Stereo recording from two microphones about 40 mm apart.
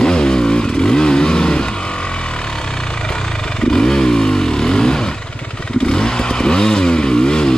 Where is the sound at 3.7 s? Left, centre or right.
Centre.